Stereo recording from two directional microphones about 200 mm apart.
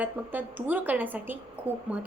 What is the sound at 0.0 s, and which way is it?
A woman's voice, 10° right (ahead or behind).